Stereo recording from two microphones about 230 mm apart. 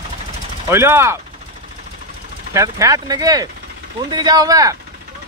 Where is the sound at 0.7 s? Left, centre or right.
Centre.